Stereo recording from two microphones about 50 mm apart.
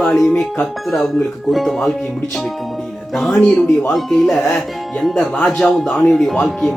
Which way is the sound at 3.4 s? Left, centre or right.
Left.